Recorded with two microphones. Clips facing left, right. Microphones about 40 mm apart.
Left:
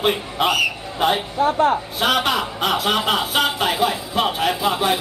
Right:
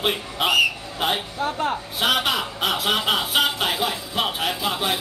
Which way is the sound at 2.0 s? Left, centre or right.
Centre.